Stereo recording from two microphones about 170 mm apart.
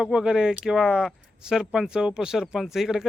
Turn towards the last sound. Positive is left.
turn(degrees=0)  # may be behind; listen again after turning